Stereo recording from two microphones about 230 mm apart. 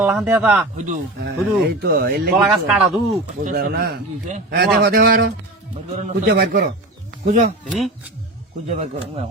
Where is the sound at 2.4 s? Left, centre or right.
Centre.